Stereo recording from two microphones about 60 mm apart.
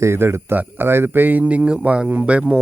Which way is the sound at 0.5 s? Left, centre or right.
Right.